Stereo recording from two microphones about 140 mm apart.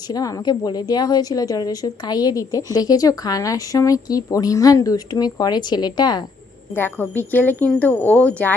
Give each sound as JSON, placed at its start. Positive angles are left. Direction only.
{"t": 0.1, "sound": "a woman's voice", "side_deg": 25}
{"t": 6.7, "sound": "speech", "side_deg": 15}